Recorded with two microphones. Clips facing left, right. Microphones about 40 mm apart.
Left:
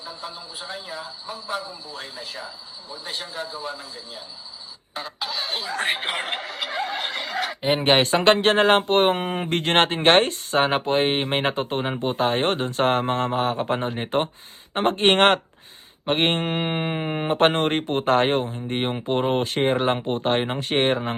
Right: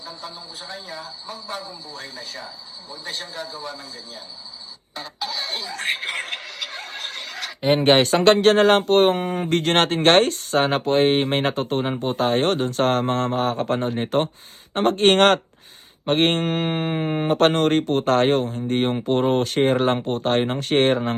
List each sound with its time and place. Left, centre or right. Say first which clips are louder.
0.0 s speech: even; left
7.8 s speech: right 2 dB; left
9.2 s speech: right 2 dB; left
9.5 s speech: right 1 dB; left
16.9 s speech: right 3 dB; centre
17.2 s speech: right 2 dB; left